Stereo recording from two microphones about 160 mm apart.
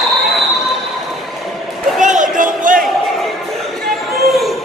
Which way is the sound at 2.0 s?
50° right (ahead or behind).